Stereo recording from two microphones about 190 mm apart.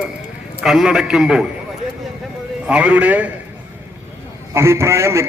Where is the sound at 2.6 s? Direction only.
5° right (ahead or behind).